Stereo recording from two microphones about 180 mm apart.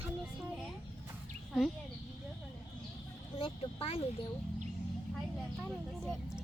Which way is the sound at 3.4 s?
30° left (ahead or behind).